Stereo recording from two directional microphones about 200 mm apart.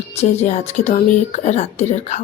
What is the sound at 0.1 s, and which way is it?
A woman's voice, 35° left (ahead or behind).